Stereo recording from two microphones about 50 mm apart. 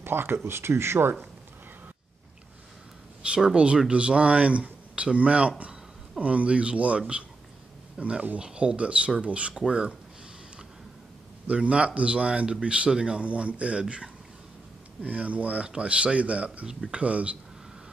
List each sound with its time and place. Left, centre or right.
0.0 s speech: right
3.5 s speech: centre
11.4 s speech: right
15.0 s speech: right
16.6 s speech: centre
17.0 s speech: right